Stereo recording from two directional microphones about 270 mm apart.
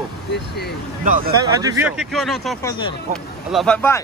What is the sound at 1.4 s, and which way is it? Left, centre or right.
Speech, centre.